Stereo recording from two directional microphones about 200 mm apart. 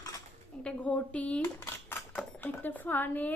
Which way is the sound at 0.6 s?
5° left (ahead or behind).